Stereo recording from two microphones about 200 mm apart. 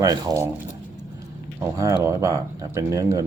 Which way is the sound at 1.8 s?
15° right (ahead or behind).